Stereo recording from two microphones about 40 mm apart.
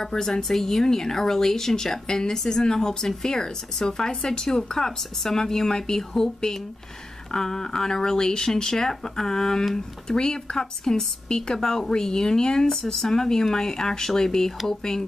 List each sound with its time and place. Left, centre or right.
0.0 s speech: centre